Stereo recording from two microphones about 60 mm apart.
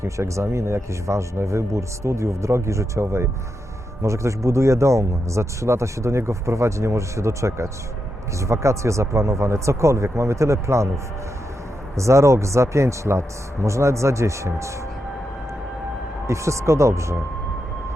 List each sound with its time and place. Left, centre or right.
0.0 s speech: right
16.2 s speech: right